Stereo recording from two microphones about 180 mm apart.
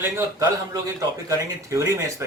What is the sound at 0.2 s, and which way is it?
A man's voice, 15° right (ahead or behind).